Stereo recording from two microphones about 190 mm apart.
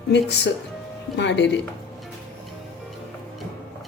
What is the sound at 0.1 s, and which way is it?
A woman's voice, 65° left (ahead or behind).